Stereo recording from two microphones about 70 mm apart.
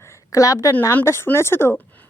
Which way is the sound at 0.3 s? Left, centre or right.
Left.